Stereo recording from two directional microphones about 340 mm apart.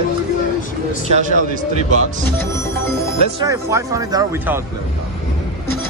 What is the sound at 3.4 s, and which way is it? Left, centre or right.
Speech, centre.